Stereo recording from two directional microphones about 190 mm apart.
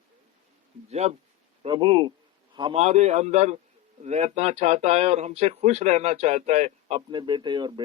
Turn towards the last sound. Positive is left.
turn(degrees=-25)  # may be behind; listen again after turning